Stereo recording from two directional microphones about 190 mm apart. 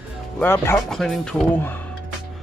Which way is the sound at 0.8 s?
Centre (ahead or behind).